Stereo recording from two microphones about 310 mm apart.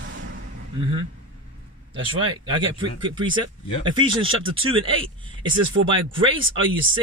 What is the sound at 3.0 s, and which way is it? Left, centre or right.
Speech, centre.